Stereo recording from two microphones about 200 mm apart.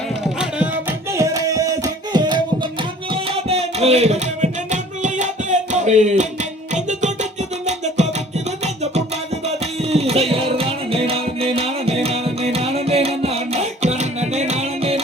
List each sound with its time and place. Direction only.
1.1 s hands: 15° right (ahead or behind)
3.3 s music: 30° right (ahead or behind)
9.9 s music: 30° right (ahead or behind)